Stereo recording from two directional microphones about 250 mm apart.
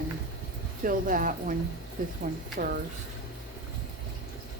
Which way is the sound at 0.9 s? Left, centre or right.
Right.